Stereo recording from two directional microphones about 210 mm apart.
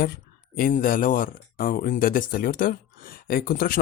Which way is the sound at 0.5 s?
45° left (ahead or behind).